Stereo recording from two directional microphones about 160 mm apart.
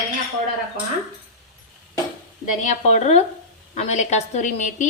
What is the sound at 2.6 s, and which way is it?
A woman's voice, 45° left (ahead or behind).